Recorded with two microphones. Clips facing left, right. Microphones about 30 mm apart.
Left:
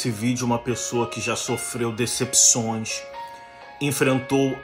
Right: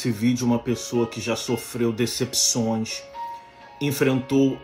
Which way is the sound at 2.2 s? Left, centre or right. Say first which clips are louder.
Left 2 dB; left.